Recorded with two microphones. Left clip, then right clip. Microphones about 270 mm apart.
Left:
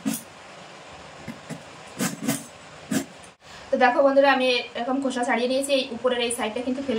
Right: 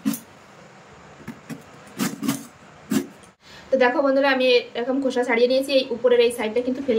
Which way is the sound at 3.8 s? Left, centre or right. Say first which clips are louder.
Left 2 dB; centre.